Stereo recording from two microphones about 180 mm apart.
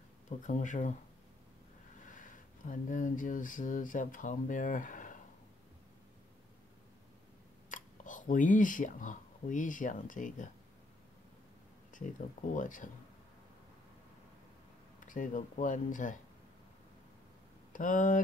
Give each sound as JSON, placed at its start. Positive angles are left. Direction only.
{"t": 0.4, "sound": "speech", "side_deg": 45}
{"t": 2.0, "sound": "speech", "side_deg": 45}
{"t": 7.7, "sound": "speech", "side_deg": 45}
{"t": 12.4, "sound": "speech", "side_deg": 45}
{"t": 15.0, "sound": "speech", "side_deg": 45}
{"t": 17.7, "sound": "speech", "side_deg": 45}